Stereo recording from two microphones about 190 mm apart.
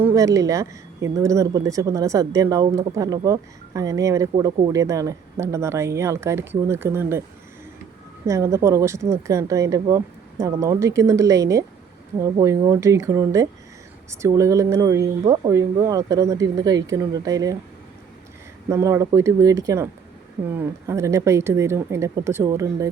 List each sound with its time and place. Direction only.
0.0 s speech: 15° right (ahead or behind)
8.3 s speech: 15° right (ahead or behind)
18.7 s speech: 15° right (ahead or behind)